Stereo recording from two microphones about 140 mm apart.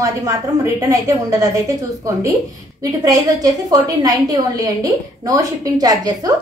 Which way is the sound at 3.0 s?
25° right (ahead or behind).